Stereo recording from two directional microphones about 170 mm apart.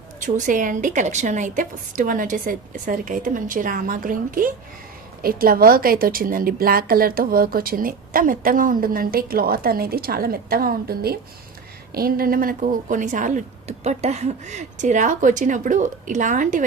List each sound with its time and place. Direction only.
0.2 s a woman's voice: 50° right (ahead or behind)